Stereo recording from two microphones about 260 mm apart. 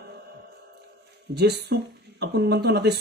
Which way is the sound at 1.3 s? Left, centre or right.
Right.